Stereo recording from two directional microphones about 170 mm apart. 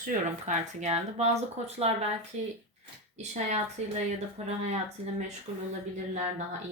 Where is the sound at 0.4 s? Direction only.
45° right (ahead or behind).